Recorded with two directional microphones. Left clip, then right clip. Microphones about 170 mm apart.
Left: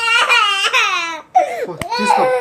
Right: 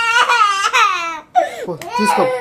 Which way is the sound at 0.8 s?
55° right (ahead or behind).